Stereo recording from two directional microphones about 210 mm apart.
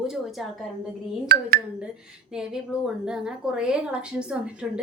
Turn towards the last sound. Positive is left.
turn(degrees=-5)  # may be behind; listen again after turning